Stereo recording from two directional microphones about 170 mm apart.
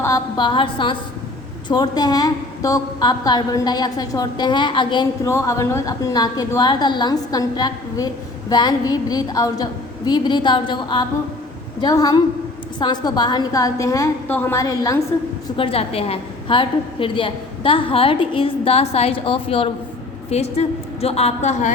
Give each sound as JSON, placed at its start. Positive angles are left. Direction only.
{"t": 0.0, "sound": "a woman's voice", "side_deg": 25}
{"t": 5.3, "sound": "a woman's voice", "side_deg": 15}
{"t": 15.5, "sound": "a woman's voice", "side_deg": 35}